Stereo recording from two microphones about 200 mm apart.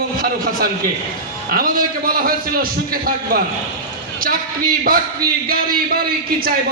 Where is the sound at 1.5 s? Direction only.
45° right (ahead or behind).